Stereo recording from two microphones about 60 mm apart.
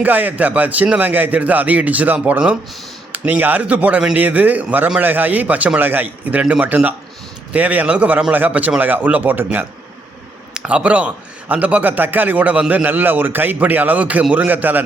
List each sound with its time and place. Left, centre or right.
0.0 s a man's voice: right
10.5 s a man's voice: centre